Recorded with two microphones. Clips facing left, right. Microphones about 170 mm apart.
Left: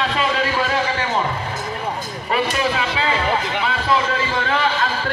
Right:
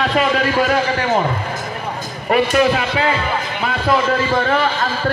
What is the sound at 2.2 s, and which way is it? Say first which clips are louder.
Speech: right 6 dB; 50° right (ahead or behind).